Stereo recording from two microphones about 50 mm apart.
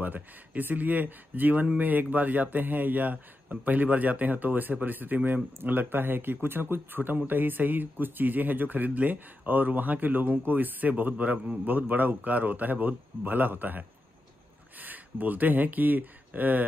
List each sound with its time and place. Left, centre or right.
0.0 s speech: right